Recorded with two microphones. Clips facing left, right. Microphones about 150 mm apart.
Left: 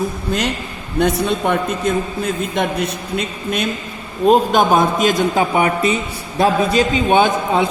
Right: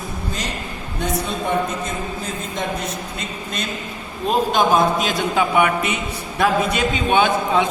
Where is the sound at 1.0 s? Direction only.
70° left (ahead or behind).